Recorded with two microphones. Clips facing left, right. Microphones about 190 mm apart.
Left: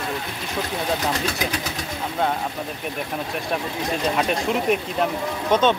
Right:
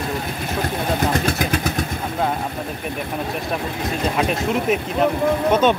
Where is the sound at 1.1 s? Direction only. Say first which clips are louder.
Right 5 dB; 55° right (ahead or behind).